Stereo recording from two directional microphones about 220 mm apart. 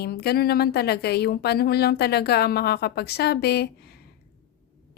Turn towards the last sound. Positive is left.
turn(degrees=50)  # may be behind; listen again after turning